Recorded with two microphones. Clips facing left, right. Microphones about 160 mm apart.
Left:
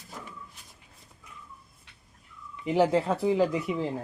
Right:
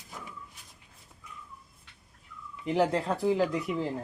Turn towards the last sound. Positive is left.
turn(degrees=0)  # may be behind; listen again after turning